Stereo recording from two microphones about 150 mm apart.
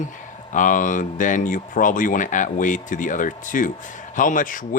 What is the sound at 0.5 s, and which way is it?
Speech, 60° left (ahead or behind).